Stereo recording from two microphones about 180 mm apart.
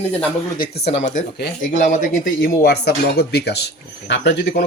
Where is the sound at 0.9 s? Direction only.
40° left (ahead or behind).